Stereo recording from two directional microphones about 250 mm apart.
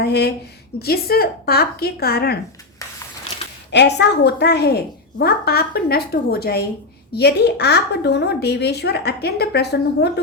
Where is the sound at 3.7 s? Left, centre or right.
Left.